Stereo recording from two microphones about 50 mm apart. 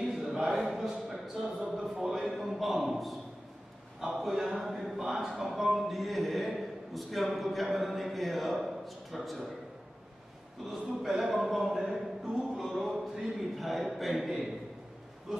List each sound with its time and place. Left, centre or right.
0.0 s a sound: centre
1.8 s speech: centre
2.3 s a sound: centre
4.0 s a man's voice: centre
4.3 s speech: centre
4.6 s a man's voice: centre
10.6 s a man's voice: centre